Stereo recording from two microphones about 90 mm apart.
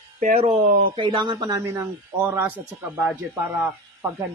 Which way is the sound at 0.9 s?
65° right (ahead or behind).